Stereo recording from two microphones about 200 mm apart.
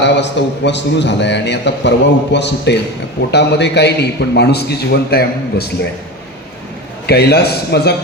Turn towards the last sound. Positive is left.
turn(degrees=55)  # may be behind; listen again after turning